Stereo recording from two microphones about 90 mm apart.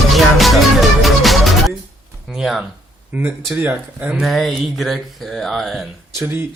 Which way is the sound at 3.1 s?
20° right (ahead or behind).